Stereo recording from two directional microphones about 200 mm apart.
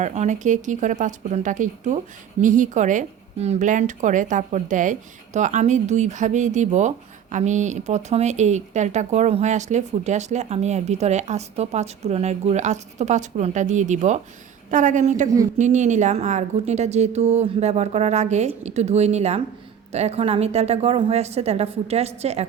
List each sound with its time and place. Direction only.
0.0 s a woman's voice: 35° right (ahead or behind)